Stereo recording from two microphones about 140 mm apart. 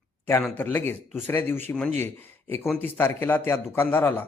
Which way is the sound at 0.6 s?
15° left (ahead or behind).